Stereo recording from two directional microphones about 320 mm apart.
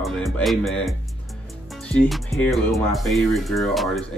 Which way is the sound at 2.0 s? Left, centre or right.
Centre.